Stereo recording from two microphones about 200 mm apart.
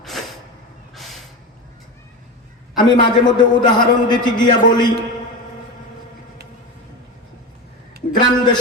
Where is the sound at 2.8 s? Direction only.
20° left (ahead or behind).